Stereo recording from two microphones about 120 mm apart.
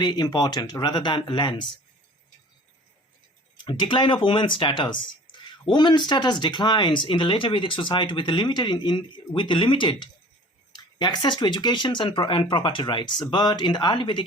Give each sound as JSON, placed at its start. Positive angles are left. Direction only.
{"t": 0.0, "sound": "speech", "side_deg": 35}
{"t": 3.6, "sound": "speech", "side_deg": 40}